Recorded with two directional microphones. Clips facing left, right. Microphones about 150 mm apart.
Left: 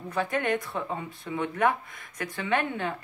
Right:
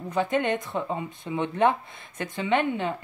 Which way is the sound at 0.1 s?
20° right (ahead or behind).